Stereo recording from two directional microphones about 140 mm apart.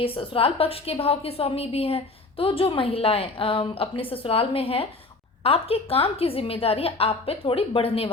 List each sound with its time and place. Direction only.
0.0 s a woman's voice: 40° left (ahead or behind)